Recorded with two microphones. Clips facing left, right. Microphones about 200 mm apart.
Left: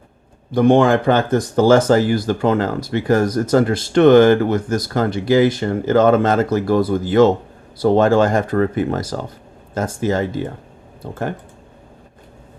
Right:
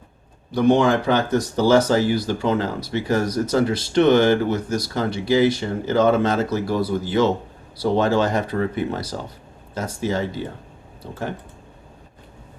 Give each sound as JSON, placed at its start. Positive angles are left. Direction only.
{"t": 0.5, "sound": "speech", "side_deg": 50}